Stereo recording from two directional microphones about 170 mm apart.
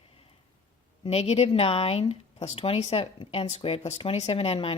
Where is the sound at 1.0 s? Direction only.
35° left (ahead or behind).